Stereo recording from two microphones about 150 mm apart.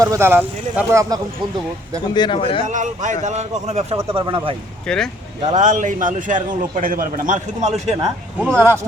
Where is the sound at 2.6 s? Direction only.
55° right (ahead or behind); by 4.3 s 35° right (ahead or behind).